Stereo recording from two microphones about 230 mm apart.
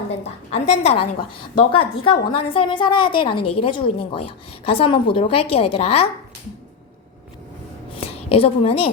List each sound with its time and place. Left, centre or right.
0.1 s a woman's voice: left
8.0 s a woman's voice: left